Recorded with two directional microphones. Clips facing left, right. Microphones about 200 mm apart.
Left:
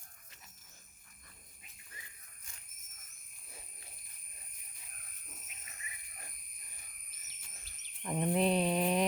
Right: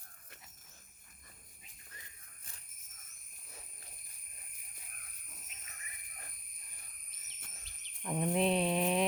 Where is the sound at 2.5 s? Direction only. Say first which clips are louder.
Even; 35° right (ahead or behind).